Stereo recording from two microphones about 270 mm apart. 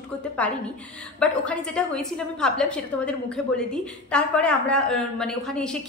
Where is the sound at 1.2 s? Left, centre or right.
Centre.